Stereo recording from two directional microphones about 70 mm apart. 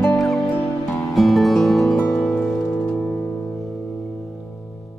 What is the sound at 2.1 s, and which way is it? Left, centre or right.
Music, centre.